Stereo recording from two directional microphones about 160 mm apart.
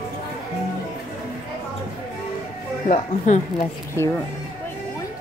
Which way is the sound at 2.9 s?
50° left (ahead or behind).